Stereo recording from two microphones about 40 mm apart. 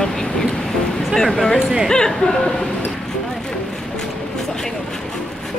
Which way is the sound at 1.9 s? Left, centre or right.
Centre.